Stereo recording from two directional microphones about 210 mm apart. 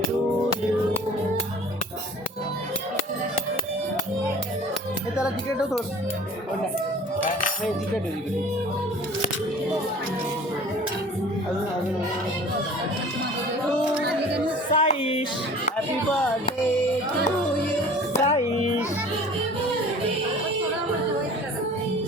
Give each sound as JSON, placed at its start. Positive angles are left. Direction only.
{"t": 5.1, "sound": "speech", "side_deg": -5}
{"t": 14.7, "sound": "a sound", "side_deg": 25}
{"t": 18.1, "sound": "music", "side_deg": 30}